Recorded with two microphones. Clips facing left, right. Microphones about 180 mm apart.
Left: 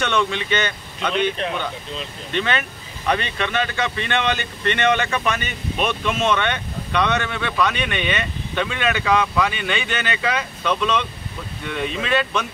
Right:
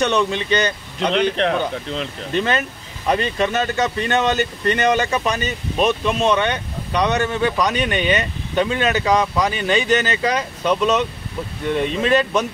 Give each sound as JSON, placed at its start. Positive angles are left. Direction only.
{"t": 0.0, "sound": "speech", "side_deg": -40}
{"t": 1.4, "sound": "speech", "side_deg": -85}
{"t": 2.3, "sound": "speech", "side_deg": -40}